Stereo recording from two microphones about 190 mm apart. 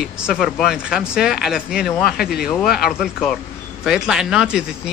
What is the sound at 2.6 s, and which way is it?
Speech, 55° left (ahead or behind).